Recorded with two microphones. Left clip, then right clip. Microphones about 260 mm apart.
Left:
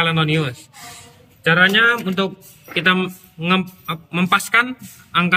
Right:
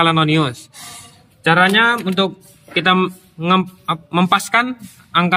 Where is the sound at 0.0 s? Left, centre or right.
Centre.